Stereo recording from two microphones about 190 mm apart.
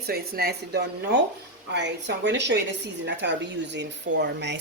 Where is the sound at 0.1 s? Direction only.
55° right (ahead or behind).